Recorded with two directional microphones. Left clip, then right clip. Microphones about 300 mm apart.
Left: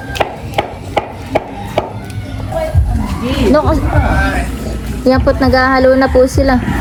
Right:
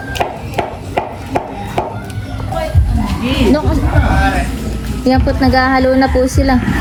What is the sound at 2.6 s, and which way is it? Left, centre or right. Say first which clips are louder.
Music: left 1 dB; centre.